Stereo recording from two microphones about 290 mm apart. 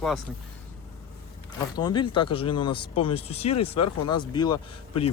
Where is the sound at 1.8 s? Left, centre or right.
Centre.